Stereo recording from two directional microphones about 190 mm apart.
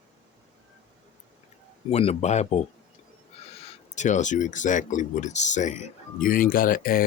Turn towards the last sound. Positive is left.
turn(degrees=50)  # may be behind; listen again after turning